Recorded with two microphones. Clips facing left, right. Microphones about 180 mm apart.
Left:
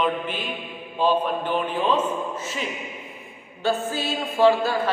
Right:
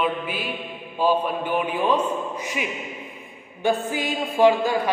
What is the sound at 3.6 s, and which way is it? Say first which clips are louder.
A man's voice: right 1 dB; 15° right (ahead or behind).